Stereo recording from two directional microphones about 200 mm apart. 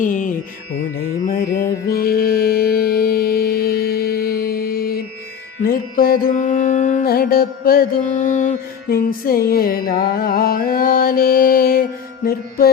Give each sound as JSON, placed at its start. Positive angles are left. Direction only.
{"t": 0.0, "sound": "music", "side_deg": 40}
{"t": 1.9, "sound": "mantra", "side_deg": 50}
{"t": 8.9, "sound": "music", "side_deg": 45}